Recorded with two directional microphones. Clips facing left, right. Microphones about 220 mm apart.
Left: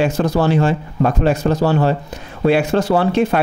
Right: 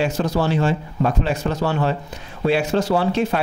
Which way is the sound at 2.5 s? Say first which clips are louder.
Left 4 dB; 55° left (ahead or behind).